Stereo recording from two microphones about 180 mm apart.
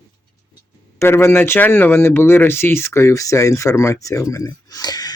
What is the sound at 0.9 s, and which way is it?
Speech, 15° left (ahead or behind).